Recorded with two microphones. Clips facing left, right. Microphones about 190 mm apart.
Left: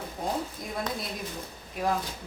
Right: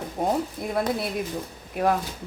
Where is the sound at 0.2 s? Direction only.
60° right (ahead or behind).